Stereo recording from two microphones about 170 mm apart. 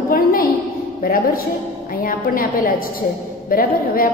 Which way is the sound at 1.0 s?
60° left (ahead or behind).